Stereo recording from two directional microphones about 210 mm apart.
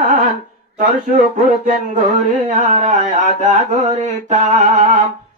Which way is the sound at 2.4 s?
35° right (ahead or behind).